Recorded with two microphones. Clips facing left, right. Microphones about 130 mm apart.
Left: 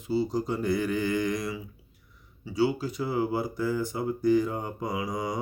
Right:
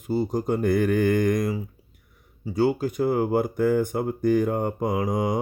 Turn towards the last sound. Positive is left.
turn(degrees=-50)  # may be behind; listen again after turning